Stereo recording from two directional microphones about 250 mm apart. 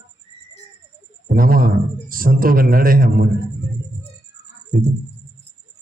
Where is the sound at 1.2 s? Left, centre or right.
Right.